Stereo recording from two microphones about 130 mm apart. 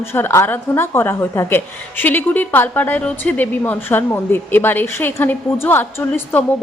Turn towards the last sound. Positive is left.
turn(degrees=15)  # may be behind; listen again after turning